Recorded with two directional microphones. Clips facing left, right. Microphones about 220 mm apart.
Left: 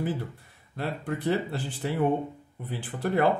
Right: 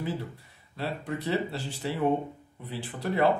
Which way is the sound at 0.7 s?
50° left (ahead or behind).